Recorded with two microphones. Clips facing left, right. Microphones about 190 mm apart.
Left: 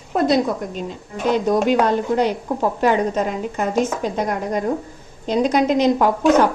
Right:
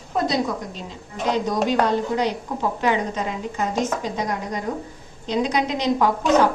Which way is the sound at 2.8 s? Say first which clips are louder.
Left 5 dB; 50° left (ahead or behind).